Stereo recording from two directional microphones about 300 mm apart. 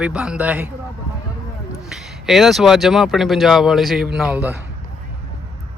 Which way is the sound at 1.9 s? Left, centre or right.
Centre.